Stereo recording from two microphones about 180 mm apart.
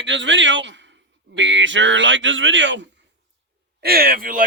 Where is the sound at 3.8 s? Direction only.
55° right (ahead or behind).